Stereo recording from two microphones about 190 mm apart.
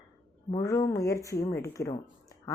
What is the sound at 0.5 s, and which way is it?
Speech, 15° left (ahead or behind).